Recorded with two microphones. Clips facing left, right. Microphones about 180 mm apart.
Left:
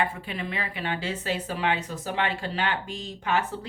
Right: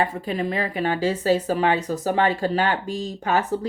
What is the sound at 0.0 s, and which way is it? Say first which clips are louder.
Speech: right 6 dB; 40° right (ahead or behind).